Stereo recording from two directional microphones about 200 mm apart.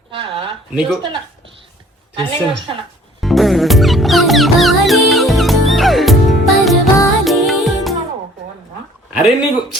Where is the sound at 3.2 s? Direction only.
Centre (ahead or behind).